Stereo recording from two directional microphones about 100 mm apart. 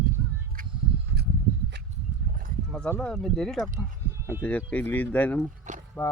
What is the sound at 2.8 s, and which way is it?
Speech, 20° left (ahead or behind).